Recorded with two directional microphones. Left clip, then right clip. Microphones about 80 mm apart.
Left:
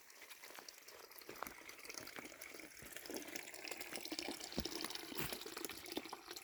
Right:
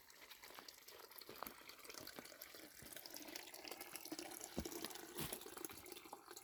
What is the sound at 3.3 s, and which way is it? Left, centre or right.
Water tap, left.